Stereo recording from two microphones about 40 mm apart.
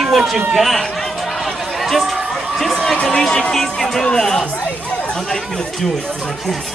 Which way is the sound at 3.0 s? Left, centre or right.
Centre.